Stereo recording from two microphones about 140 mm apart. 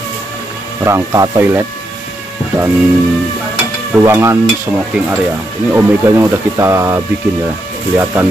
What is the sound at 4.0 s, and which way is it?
Speech, 20° right (ahead or behind).